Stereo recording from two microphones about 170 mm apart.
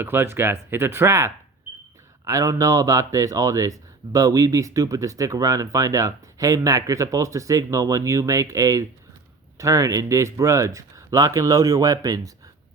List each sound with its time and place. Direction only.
0.0 s speech: 10° right (ahead or behind)